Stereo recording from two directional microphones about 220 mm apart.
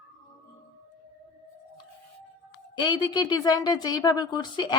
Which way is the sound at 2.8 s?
20° left (ahead or behind).